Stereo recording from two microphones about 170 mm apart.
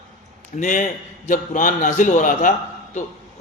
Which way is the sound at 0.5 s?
50° left (ahead or behind).